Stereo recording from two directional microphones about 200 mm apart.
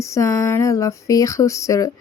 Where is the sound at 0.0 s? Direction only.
15° left (ahead or behind).